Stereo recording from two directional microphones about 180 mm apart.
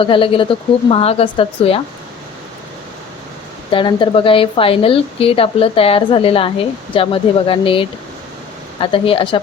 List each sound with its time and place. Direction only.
0.0 s a woman's voice: 30° left (ahead or behind)
3.7 s a woman's voice: 25° left (ahead or behind)